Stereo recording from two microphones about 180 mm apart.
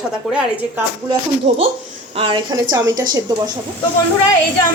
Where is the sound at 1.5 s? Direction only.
35° right (ahead or behind); by 3.0 s 20° right (ahead or behind).